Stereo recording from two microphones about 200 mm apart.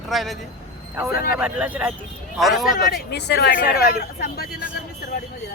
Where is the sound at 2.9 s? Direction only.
55° left (ahead or behind).